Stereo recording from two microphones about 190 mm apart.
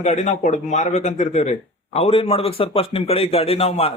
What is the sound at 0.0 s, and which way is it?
Speech, 35° left (ahead or behind).